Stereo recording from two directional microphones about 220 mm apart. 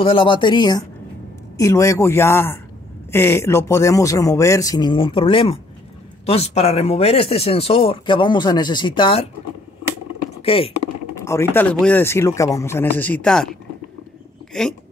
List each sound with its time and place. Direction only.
0.0 s speech: 25° left (ahead or behind)
10.4 s speech: 25° left (ahead or behind)
11.1 s speech: 15° left (ahead or behind)
14.5 s a sound: centre (ahead or behind)